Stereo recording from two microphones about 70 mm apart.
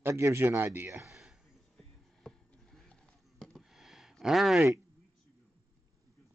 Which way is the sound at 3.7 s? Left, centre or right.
Centre.